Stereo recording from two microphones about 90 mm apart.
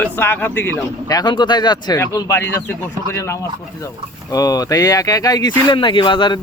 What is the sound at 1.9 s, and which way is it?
Speech, 35° left (ahead or behind).